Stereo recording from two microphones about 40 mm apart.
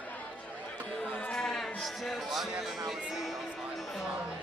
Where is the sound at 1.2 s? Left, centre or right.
Left.